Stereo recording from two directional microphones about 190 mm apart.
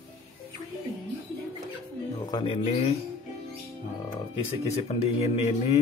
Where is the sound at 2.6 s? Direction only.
35° left (ahead or behind).